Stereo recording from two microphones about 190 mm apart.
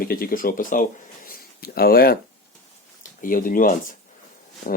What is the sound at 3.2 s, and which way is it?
Speech, 45° left (ahead or behind).